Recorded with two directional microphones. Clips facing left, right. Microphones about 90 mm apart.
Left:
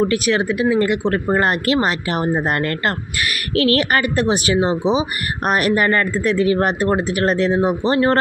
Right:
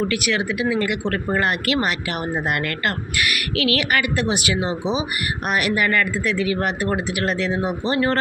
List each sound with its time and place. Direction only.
0.0 s speech: 30° left (ahead or behind)